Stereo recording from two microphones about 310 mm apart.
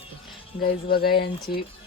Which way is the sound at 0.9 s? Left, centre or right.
Left.